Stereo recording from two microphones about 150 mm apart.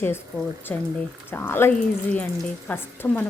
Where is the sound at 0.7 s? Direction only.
10° left (ahead or behind).